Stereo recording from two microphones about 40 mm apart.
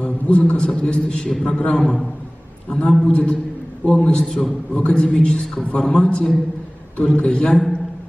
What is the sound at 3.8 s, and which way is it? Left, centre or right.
A man's voice, left.